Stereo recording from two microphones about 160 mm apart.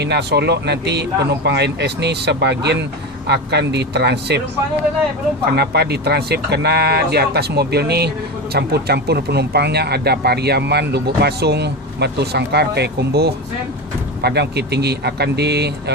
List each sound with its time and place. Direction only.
0.0 s speech: 90° right
5.5 s speech: 90° right